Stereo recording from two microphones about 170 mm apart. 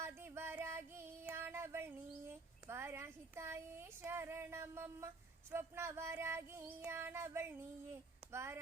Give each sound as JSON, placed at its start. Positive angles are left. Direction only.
{"t": 0.0, "sound": "child singing", "side_deg": -15}
{"t": 8.3, "sound": "speech", "side_deg": -15}